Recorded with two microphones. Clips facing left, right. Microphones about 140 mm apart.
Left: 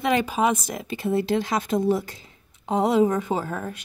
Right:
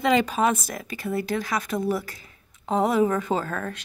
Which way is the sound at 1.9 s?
25° left (ahead or behind).